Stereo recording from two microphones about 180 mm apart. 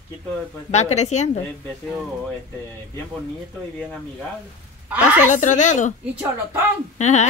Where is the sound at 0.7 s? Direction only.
40° left (ahead or behind).